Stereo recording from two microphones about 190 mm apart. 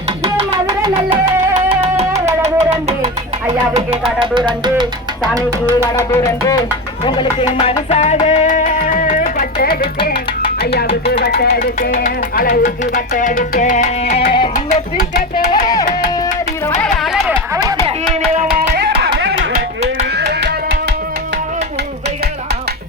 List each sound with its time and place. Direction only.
0.2 s music: 30° right (ahead or behind)
2.2 s music: 35° right (ahead or behind)
4.2 s speech: 25° right (ahead or behind)
5.9 s music: 15° left (ahead or behind); by 10.9 s 55° left (ahead or behind)
11.2 s speech: 55° left (ahead or behind); by 14.2 s 35° left (ahead or behind)
14.3 s music: 25° left (ahead or behind)
14.5 s speech: 40° left (ahead or behind)
15.6 s music: 20° left (ahead or behind)
16.8 s music: centre (ahead or behind)
18.1 s music: 40° right (ahead or behind)
18.7 s music: 65° right (ahead or behind)